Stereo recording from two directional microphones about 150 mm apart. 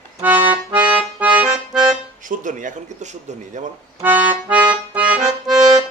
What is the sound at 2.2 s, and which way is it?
Speech, 60° right (ahead or behind).